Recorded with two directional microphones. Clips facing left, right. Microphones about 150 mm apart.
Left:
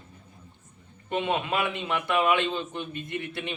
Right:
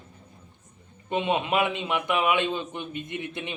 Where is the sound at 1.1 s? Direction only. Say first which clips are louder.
Right 2 dB; 20° right (ahead or behind).